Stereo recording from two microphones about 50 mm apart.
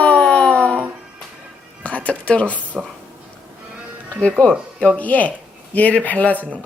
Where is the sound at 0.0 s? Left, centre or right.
Left.